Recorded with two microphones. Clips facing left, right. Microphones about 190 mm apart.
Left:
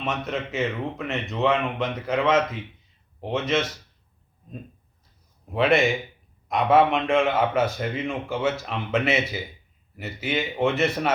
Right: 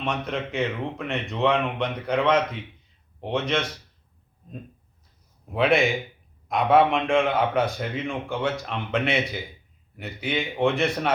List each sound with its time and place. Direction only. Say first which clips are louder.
0.0 s a man's voice: even; centre (ahead or behind)
5.5 s a man's voice: left 1 dB; centre (ahead or behind)